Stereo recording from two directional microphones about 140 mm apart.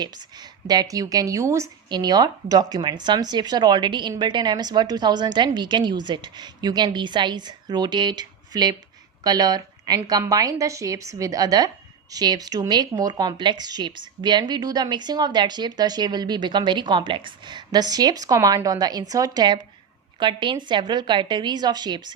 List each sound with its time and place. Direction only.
0.0 s a woman's voice: 30° right (ahead or behind)